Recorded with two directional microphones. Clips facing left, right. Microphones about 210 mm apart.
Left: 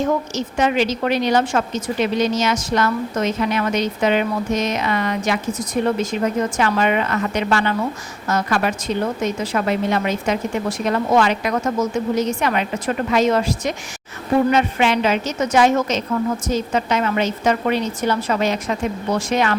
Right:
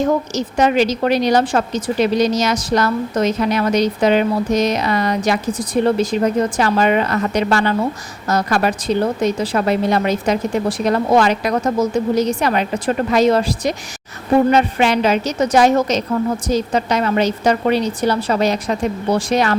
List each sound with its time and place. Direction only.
0.3 s a woman's voice: 40° right (ahead or behind)